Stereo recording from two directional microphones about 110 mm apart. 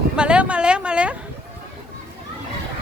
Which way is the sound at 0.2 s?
10° right (ahead or behind).